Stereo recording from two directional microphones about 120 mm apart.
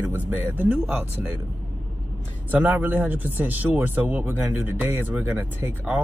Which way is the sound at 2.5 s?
15° right (ahead or behind).